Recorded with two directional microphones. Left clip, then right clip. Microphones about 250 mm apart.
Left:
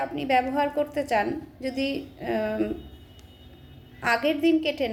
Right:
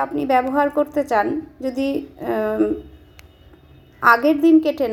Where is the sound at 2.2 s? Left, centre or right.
Right.